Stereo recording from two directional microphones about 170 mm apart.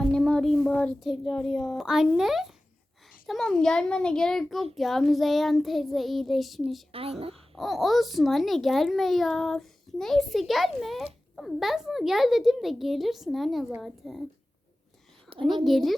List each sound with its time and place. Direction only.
0.1 s a child's voice: 5° left (ahead or behind)
6.9 s speech: 35° right (ahead or behind)
7.5 s a child's voice: centre (ahead or behind)
15.3 s a sound: 35° right (ahead or behind)
15.6 s a child's voice: centre (ahead or behind)